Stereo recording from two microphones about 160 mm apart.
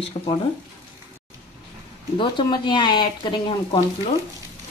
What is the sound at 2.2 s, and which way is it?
Speech, 30° left (ahead or behind).